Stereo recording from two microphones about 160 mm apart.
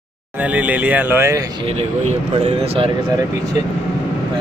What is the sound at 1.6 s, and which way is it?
Speech, 40° right (ahead or behind).